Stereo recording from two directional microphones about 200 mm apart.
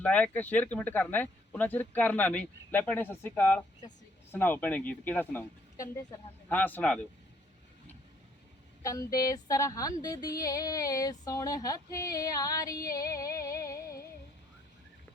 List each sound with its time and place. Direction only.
0.0 s speech: 5° left (ahead or behind)
8.8 s speech: 15° left (ahead or behind)